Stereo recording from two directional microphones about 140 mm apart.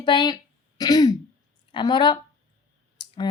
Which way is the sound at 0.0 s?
35° left (ahead or behind).